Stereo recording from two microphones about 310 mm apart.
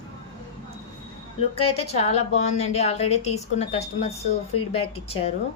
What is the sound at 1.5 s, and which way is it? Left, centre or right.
A woman's voice, centre.